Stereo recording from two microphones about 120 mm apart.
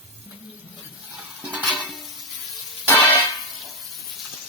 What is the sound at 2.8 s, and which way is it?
Music, 15° left (ahead or behind).